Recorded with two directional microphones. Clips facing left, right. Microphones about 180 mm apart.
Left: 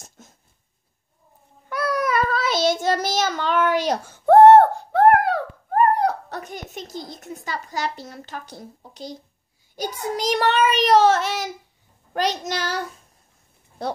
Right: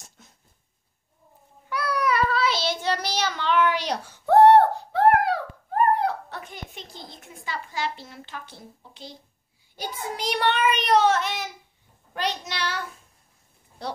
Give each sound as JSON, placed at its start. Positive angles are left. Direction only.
{"t": 0.2, "sound": "a sound", "side_deg": 45}
{"t": 1.7, "sound": "child singing", "side_deg": 45}
{"t": 13.8, "sound": "speech", "side_deg": 50}